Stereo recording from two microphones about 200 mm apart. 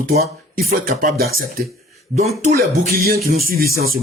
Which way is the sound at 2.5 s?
45° right (ahead or behind).